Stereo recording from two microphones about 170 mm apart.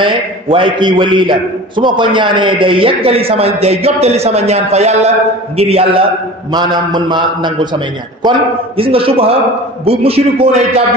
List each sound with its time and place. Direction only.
0.0 s a man's voice: 30° right (ahead or behind)